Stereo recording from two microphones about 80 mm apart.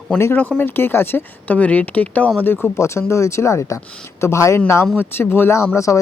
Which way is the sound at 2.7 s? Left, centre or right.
Left.